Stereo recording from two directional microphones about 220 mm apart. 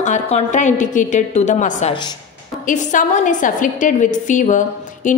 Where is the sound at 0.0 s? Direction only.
35° left (ahead or behind).